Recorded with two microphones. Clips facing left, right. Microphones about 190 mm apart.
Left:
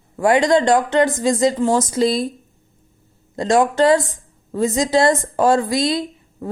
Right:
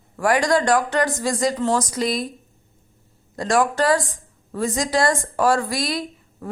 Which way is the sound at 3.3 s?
20° left (ahead or behind).